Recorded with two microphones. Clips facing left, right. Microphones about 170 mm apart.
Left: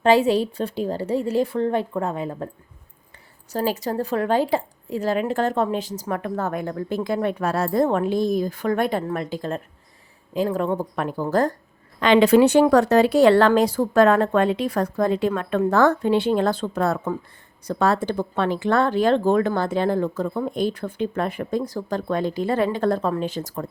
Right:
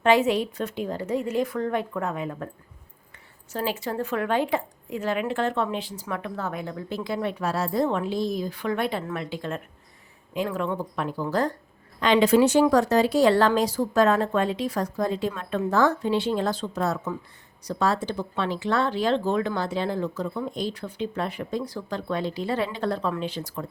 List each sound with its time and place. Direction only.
0.0 s a woman's voice: 35° left (ahead or behind)
3.5 s speech: 40° left (ahead or behind)
11.9 s speech: 65° left (ahead or behind); by 23.6 s 45° left (ahead or behind)